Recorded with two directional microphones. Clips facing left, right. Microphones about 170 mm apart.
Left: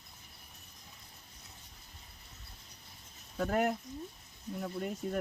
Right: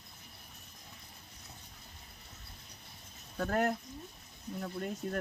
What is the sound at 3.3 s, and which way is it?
Speech, 5° left (ahead or behind).